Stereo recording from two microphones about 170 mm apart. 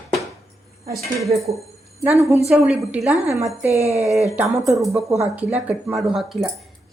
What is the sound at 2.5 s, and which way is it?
Speech, 5° right (ahead or behind).